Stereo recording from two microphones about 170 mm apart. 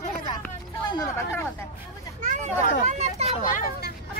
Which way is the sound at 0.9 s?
20° left (ahead or behind).